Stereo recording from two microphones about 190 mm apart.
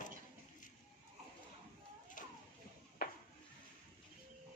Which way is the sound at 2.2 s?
45° left (ahead or behind).